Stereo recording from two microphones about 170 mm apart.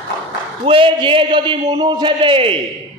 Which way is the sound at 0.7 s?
30° right (ahead or behind).